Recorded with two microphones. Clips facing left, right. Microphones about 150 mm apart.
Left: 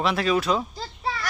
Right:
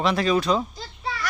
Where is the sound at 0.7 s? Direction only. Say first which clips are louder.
Left 2 dB; 35° left (ahead or behind).